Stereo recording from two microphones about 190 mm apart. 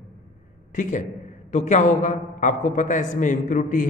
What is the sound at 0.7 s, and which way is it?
A man's voice, 40° left (ahead or behind).